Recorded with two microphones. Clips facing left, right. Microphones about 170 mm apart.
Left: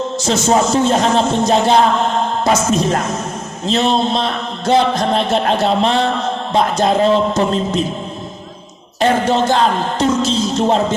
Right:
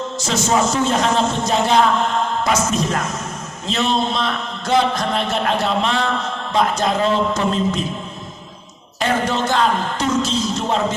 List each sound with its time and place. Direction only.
0.3 s a man's voice: 30° left (ahead or behind)
9.0 s a man's voice: 30° left (ahead or behind)